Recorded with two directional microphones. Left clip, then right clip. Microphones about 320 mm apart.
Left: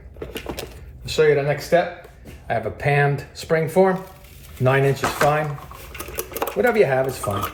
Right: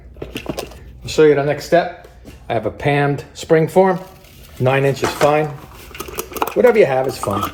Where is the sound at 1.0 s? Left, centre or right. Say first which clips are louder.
Right 5 dB; right.